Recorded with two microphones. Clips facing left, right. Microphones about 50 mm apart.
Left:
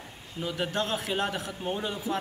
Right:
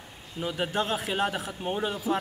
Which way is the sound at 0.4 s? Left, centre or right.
Centre.